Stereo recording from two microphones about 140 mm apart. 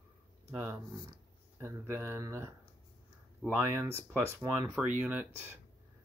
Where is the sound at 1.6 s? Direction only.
20° right (ahead or behind).